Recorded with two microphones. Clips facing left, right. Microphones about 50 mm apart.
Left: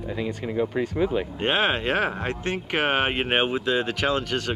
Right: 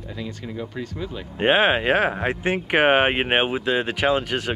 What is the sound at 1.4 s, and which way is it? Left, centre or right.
Speech, centre.